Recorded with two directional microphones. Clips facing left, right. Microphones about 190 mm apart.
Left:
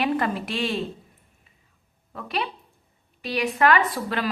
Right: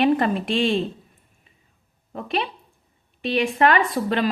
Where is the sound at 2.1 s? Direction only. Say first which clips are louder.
Right 3 dB; 25° right (ahead or behind).